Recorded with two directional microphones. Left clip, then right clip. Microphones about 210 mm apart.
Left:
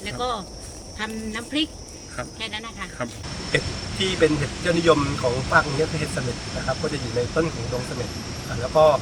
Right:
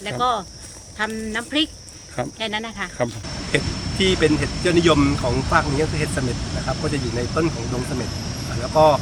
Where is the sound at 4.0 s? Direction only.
30° right (ahead or behind).